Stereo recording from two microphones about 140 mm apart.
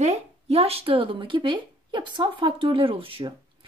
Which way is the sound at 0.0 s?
50° right (ahead or behind).